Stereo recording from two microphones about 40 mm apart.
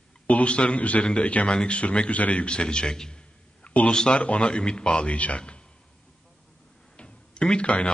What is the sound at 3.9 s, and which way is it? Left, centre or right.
A man's voice, left.